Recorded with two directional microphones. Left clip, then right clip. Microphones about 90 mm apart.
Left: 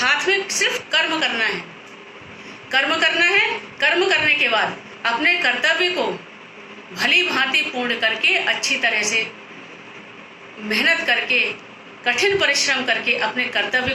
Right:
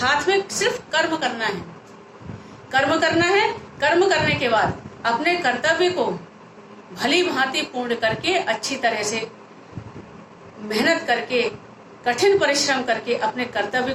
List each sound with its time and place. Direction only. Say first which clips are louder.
0.0 s a sound: left 1 dB; 55° right (ahead or behind)
1.4 s a woman's voice: left 4 dB; 50° right (ahead or behind)
2.6 s a woman's voice: left 1 dB; 55° right (ahead or behind)
6.9 s a woman's voice: left 3 dB; 55° right (ahead or behind)
10.7 s a woman's voice: left 2 dB; 50° right (ahead or behind)